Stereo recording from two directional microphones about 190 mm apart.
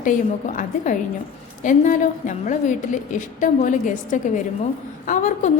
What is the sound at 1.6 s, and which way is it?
A woman's voice, 40° left (ahead or behind).